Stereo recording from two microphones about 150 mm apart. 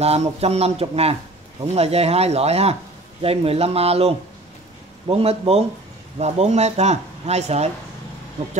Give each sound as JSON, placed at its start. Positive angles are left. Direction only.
{"t": 0.0, "sound": "a man's voice", "side_deg": -45}